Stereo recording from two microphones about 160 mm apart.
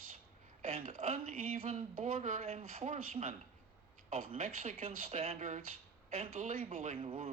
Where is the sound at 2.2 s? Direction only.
55° right (ahead or behind).